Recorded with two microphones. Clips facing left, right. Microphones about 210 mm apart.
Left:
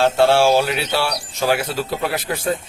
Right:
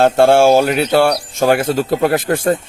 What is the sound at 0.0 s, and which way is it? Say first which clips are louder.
Speech: right 5 dB; 50° right (ahead or behind).